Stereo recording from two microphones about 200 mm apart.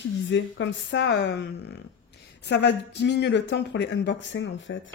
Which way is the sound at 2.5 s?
60° left (ahead or behind).